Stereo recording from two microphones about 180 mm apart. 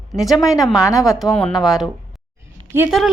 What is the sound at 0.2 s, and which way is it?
Speech, centre (ahead or behind).